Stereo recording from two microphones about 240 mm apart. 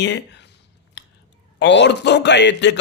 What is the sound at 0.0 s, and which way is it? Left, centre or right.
Speech, left.